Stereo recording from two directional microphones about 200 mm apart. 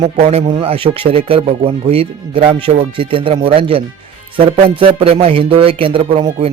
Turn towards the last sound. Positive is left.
turn(degrees=-25)  # may be behind; listen again after turning